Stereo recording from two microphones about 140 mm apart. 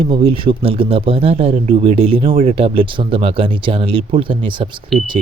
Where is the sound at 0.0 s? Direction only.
40° right (ahead or behind).